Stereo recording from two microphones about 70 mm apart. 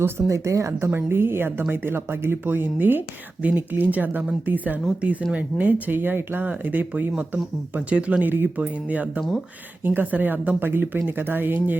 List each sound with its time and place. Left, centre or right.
0.0 s speech: right
0.9 s speech: right